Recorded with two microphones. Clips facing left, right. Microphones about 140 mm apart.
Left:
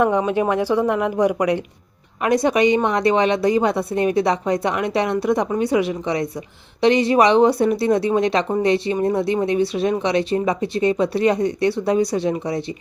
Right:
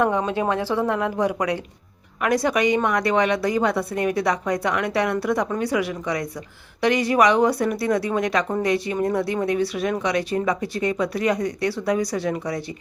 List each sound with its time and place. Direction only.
0.0 s a woman's voice: 15° left (ahead or behind)